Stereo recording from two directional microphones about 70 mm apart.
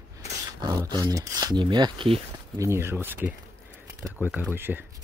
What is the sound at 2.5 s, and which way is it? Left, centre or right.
Speech, right.